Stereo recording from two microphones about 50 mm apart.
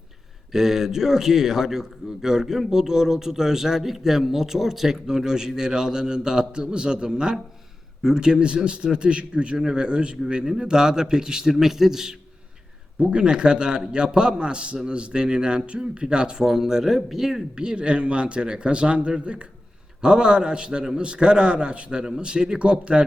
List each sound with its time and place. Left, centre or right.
0.5 s a man's voice: centre
13.0 s a man's voice: centre
17.5 s a man's voice: centre